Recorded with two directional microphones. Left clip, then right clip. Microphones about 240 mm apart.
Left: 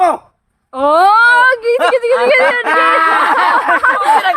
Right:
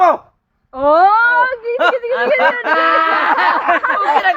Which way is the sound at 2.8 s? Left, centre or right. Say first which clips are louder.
Left 2 dB; centre.